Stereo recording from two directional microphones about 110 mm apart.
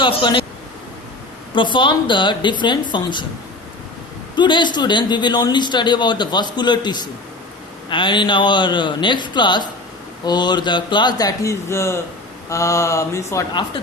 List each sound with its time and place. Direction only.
0.0 s speech: 45° left (ahead or behind)
1.5 s a man's voice: 45° left (ahead or behind)
4.4 s a man's voice: 45° left (ahead or behind); by 11.9 s 25° left (ahead or behind)
12.5 s mantra: 30° left (ahead or behind)